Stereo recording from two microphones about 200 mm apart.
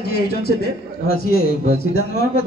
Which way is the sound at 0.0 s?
50° left (ahead or behind).